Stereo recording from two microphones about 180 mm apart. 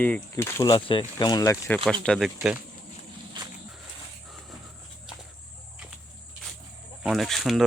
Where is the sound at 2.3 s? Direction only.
5° right (ahead or behind).